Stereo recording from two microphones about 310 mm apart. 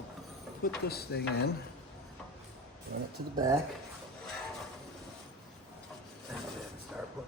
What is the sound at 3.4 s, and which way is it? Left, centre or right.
Speech, centre.